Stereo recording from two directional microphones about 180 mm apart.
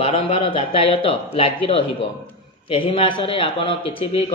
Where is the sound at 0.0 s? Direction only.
30° left (ahead or behind).